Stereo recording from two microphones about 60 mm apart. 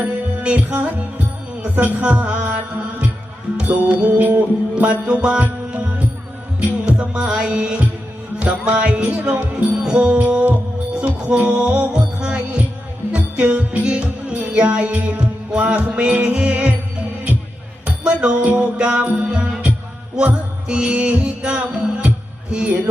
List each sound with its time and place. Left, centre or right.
0.0 s music: right
17.8 s music: centre